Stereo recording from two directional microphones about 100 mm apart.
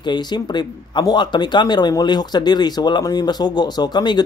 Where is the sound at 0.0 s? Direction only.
50° left (ahead or behind).